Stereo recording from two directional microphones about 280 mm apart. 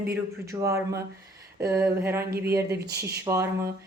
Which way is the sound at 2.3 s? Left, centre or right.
Right.